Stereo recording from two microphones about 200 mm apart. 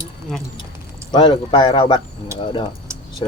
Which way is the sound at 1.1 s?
25° left (ahead or behind).